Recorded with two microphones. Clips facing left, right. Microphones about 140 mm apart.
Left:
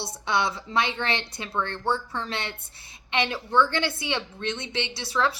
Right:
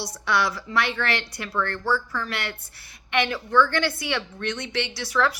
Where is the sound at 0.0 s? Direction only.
25° left (ahead or behind).